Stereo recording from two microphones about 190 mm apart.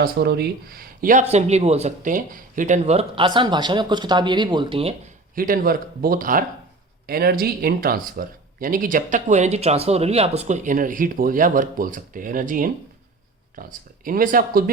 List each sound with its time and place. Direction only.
0.0 s speech: 55° right (ahead or behind); by 4.9 s 30° right (ahead or behind)
5.3 s speech: 50° right (ahead or behind)